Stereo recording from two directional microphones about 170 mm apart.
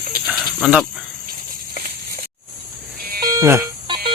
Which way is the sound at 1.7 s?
60° right (ahead or behind).